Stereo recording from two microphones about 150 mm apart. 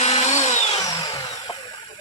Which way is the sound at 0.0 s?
50° left (ahead or behind).